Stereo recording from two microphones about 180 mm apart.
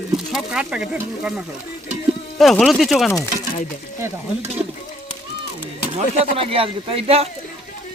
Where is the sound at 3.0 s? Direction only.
15° left (ahead or behind).